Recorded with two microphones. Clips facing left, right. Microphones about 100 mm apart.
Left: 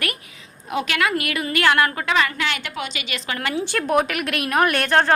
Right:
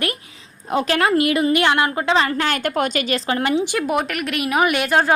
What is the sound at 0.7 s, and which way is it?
A woman's voice, 35° right (ahead or behind).